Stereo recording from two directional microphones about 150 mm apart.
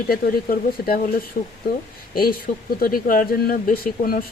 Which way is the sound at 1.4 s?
65° left (ahead or behind).